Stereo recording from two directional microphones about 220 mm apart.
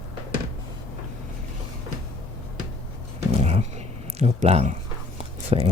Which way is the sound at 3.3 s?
30° right (ahead or behind).